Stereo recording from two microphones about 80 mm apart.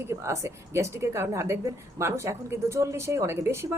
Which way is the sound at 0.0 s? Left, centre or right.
Right.